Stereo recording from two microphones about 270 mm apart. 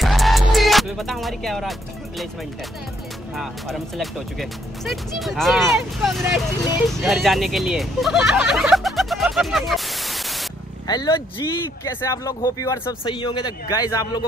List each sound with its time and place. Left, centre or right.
0.0 s music: centre
3.3 s speech: centre
10.9 s speech: centre